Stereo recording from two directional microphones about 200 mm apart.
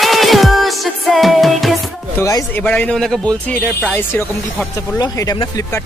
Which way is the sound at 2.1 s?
15° left (ahead or behind).